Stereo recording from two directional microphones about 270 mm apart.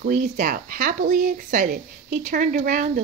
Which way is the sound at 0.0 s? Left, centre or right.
Right.